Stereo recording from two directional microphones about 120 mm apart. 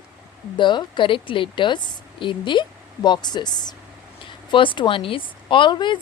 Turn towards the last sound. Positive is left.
turn(degrees=40)  # may be behind; listen again after turning